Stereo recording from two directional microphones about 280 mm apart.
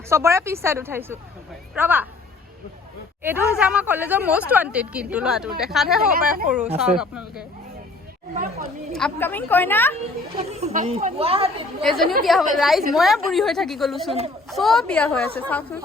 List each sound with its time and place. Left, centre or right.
0.1 s a woman's voice: centre
3.2 s a woman's voice: centre
8.9 s a woman's voice: centre
10.3 s speech: right
11.8 s a woman's voice: centre